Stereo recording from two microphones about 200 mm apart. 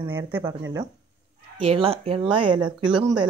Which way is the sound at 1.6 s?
30° right (ahead or behind).